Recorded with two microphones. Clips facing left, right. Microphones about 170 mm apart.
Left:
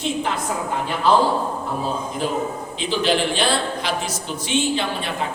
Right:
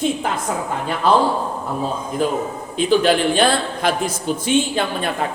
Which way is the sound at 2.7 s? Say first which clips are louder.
Right 6 dB; 50° right (ahead or behind).